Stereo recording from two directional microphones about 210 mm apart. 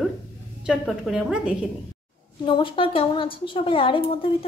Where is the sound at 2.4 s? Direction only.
25° left (ahead or behind).